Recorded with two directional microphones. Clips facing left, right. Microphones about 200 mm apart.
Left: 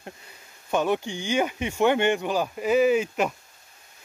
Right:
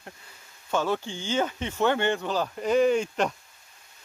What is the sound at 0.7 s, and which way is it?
Speech, 15° left (ahead or behind).